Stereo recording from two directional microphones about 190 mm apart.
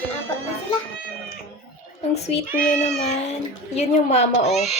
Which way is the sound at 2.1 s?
35° left (ahead or behind).